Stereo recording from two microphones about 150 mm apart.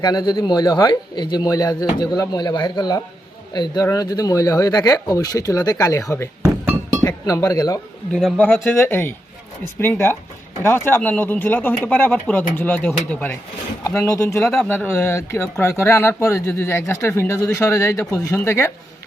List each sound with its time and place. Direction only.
0.0 s a man's voice: 25° left (ahead or behind)
7.3 s a man's voice: 20° left (ahead or behind)
8.1 s speech: 5° left (ahead or behind)
8.5 s a man's voice: 15° left (ahead or behind)
14.5 s speech: 5° left (ahead or behind)